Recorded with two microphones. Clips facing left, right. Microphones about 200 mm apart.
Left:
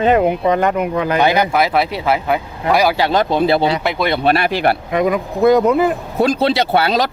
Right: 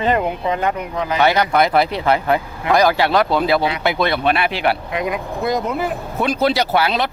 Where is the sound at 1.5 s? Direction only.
5° left (ahead or behind); by 3.8 s 30° left (ahead or behind).